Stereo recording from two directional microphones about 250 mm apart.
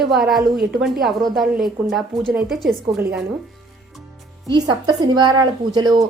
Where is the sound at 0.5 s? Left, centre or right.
Right.